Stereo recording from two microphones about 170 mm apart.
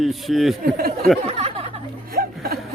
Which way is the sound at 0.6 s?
60° right (ahead or behind).